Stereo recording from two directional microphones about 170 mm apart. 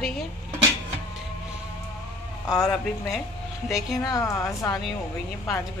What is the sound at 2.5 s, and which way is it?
Speech, centre (ahead or behind).